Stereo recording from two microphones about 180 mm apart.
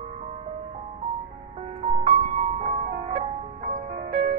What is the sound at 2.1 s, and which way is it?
Music, 35° right (ahead or behind).